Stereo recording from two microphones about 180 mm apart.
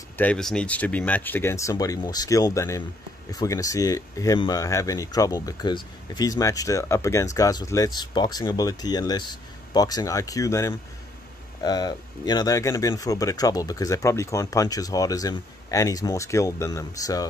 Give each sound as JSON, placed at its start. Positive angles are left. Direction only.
{"t": 0.2, "sound": "speech", "side_deg": 5}